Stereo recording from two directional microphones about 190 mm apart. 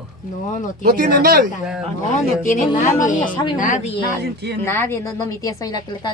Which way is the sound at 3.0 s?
45° left (ahead or behind).